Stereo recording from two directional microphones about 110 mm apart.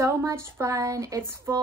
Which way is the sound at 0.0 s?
25° right (ahead or behind).